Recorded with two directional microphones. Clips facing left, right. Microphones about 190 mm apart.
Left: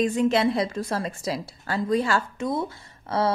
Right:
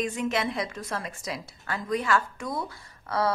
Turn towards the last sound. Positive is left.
turn(degrees=25)  # may be behind; listen again after turning